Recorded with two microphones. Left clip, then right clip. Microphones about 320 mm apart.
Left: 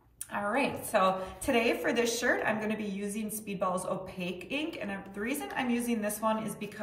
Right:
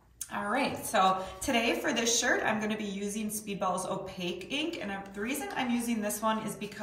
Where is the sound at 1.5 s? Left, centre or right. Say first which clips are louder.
Left 1 dB; centre.